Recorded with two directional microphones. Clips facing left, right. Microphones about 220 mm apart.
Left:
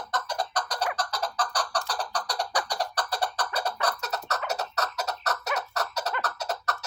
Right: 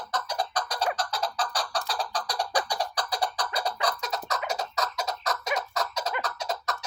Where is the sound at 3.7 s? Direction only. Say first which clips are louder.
Even; 10° right (ahead or behind).